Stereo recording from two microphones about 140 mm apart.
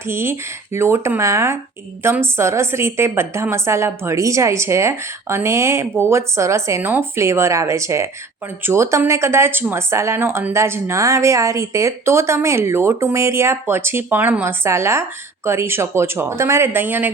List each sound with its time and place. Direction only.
0.0 s speech: 15° right (ahead or behind)